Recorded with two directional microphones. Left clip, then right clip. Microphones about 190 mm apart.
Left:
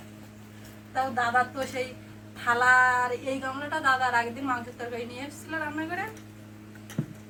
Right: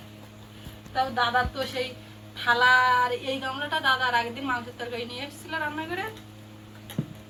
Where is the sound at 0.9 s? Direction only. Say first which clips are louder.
Right 1 dB; 5° left (ahead or behind).